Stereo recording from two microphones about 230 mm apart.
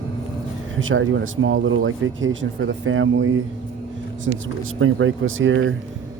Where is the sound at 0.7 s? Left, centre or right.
Right.